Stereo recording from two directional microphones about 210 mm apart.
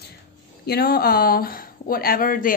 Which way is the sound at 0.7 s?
50° left (ahead or behind).